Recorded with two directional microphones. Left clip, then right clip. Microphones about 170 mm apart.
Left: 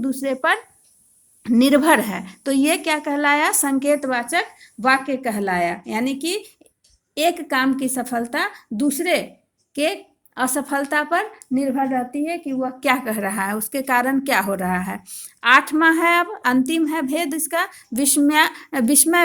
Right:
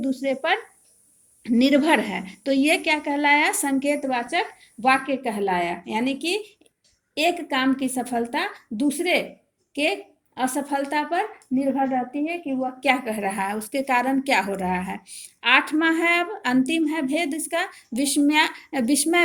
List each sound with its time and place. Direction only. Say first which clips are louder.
0.0 s a woman's voice: left 3 dB; 55° left (ahead or behind)
7.5 s a woman's voice: left 3 dB; 60° left (ahead or behind)
18.1 s a woman's voice: left 3 dB; 60° left (ahead or behind)